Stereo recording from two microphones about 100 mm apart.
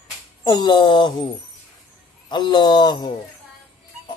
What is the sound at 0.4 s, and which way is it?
Cough, 50° left (ahead or behind).